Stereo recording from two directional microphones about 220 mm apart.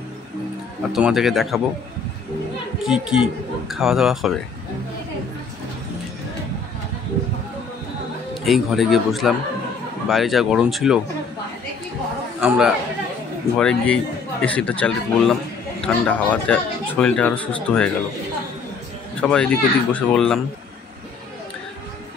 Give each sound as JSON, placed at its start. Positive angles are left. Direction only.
{"t": 0.9, "sound": "a man's voice", "side_deg": 0}
{"t": 2.9, "sound": "a man's voice", "side_deg": -5}
{"t": 8.5, "sound": "a man's voice", "side_deg": 0}
{"t": 12.4, "sound": "a man's voice", "side_deg": -5}
{"t": 19.2, "sound": "a man's voice", "side_deg": 5}